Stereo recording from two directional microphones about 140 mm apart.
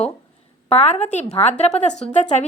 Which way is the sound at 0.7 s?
50° left (ahead or behind).